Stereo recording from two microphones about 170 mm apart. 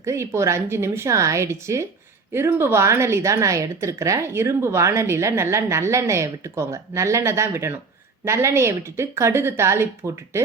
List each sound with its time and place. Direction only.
0.0 s a woman's voice: 15° right (ahead or behind)